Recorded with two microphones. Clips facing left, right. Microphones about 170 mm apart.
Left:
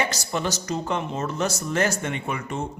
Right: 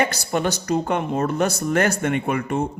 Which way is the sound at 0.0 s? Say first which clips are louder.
Right 5 dB; 55° right (ahead or behind).